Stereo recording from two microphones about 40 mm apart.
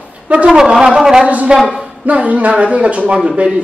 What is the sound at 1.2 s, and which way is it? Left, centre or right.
Speech, right.